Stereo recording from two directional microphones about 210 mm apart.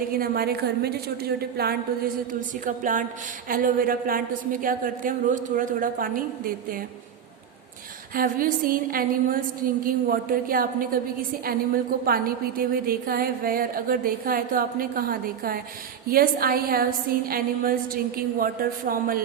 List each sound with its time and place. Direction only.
0.1 s a woman's voice: 45° right (ahead or behind)
8.1 s a woman's voice: 45° right (ahead or behind)